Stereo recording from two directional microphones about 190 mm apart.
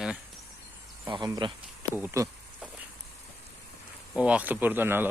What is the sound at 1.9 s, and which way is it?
Insect, 15° right (ahead or behind).